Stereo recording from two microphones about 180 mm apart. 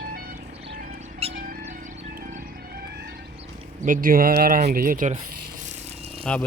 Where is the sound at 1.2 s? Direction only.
35° right (ahead or behind).